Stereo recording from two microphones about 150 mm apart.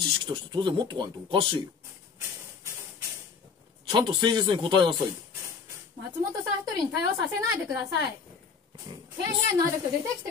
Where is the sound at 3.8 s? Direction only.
30° right (ahead or behind).